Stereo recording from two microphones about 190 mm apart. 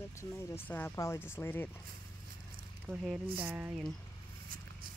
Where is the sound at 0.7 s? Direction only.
10° left (ahead or behind).